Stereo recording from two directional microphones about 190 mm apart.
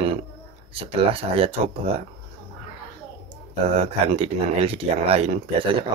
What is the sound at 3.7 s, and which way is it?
Speech, 30° right (ahead or behind).